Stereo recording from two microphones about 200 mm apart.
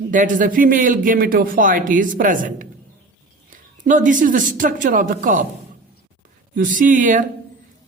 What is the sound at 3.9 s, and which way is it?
Speech, 40° right (ahead or behind).